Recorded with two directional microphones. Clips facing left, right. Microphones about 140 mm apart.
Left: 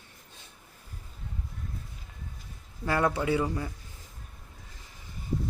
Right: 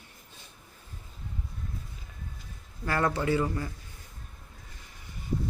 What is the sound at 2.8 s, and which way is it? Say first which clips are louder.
Speech: left 1 dB; 15° left (ahead or behind).